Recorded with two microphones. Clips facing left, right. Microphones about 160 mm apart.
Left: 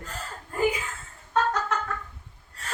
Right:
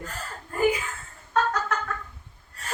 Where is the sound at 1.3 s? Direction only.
25° left (ahead or behind).